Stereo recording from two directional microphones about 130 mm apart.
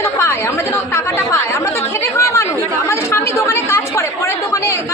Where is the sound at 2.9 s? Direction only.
20° left (ahead or behind).